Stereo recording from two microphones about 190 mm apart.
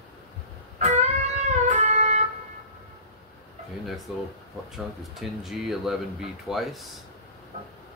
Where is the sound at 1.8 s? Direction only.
35° right (ahead or behind).